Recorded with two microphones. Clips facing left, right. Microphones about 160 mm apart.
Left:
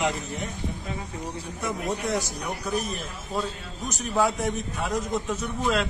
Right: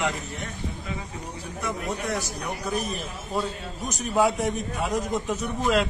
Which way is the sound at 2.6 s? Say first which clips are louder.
Even; centre (ahead or behind).